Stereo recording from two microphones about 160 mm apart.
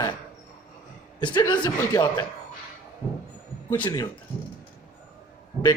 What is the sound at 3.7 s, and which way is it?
Speech, 30° left (ahead or behind).